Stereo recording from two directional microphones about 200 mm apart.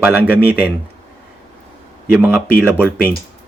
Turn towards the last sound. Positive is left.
turn(degrees=-10)  # may be behind; listen again after turning